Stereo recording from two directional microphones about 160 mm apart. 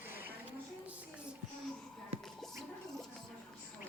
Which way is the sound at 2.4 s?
Centre (ahead or behind).